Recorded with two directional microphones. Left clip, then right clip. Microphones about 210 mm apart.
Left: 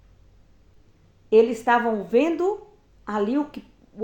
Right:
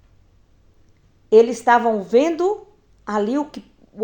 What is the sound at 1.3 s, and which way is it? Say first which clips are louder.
Speech: right 5 dB; 30° right (ahead or behind).